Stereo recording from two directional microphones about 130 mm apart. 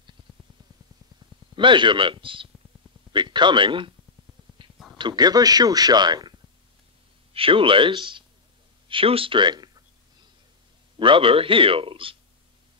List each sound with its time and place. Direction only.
1.5 s a man's voice: 40° right (ahead or behind)
4.6 s a sound: 40° right (ahead or behind)
4.9 s a man's voice: 35° right (ahead or behind)
7.3 s a man's voice: 45° right (ahead or behind)
11.0 s a man's voice: 40° right (ahead or behind)